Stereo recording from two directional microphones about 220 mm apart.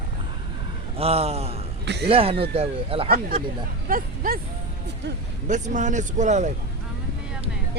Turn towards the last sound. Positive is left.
turn(degrees=-30)  # may be behind; listen again after turning